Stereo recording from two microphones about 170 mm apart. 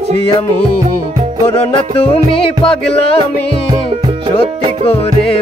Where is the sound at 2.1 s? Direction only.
35° left (ahead or behind).